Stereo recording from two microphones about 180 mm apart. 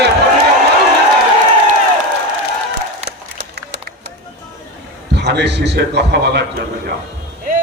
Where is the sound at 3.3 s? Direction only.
70° right (ahead or behind).